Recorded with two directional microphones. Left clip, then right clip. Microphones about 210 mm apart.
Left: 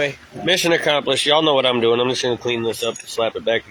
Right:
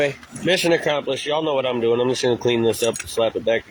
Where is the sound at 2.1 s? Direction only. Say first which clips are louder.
Right 1 dB; 20° right (ahead or behind).